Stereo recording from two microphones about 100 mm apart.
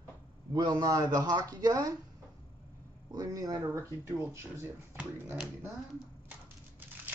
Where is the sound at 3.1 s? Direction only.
35° right (ahead or behind).